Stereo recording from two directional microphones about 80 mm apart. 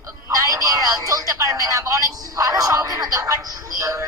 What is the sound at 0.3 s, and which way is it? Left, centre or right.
Telephone, right.